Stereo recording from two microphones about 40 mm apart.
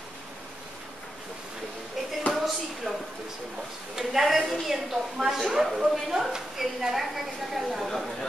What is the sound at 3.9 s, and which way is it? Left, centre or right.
A woman's voice, centre.